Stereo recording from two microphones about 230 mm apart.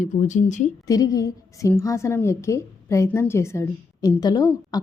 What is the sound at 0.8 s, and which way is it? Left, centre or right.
A woman's voice, centre.